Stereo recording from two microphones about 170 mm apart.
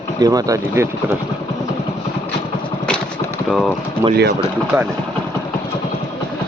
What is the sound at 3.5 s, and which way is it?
Speech, centre (ahead or behind).